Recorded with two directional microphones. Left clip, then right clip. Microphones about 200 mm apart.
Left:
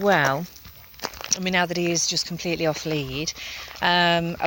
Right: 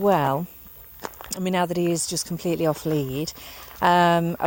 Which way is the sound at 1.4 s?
40° right (ahead or behind).